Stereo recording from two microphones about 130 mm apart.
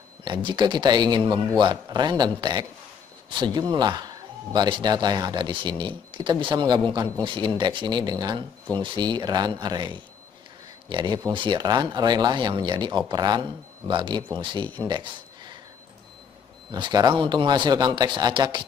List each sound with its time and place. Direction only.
0.2 s a man's voice: 35° right (ahead or behind)
14.9 s a sound: 35° right (ahead or behind)
16.7 s a man's voice: 35° right (ahead or behind)